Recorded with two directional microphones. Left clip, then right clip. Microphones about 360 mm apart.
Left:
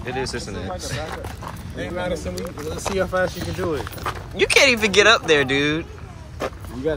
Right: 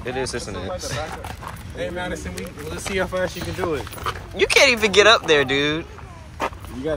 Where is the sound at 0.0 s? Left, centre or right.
Centre.